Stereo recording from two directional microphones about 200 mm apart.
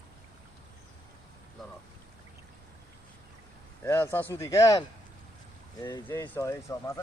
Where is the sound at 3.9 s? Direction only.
10° left (ahead or behind).